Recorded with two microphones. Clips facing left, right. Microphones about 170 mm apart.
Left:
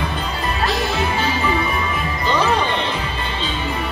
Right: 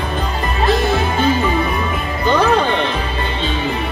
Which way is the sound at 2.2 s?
60° right (ahead or behind).